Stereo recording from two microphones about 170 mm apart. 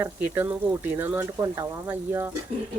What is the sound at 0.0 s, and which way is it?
Speech, 10° right (ahead or behind).